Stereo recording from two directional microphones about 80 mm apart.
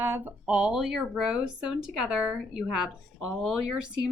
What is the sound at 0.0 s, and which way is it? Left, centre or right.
A woman's voice, right.